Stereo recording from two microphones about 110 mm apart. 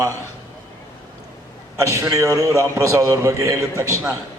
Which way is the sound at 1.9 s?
25° right (ahead or behind).